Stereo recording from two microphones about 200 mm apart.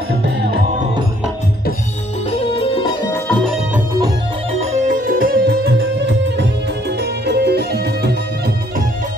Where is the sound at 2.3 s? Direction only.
30° left (ahead or behind).